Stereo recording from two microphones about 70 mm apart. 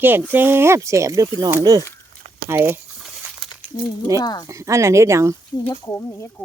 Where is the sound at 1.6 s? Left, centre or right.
Right.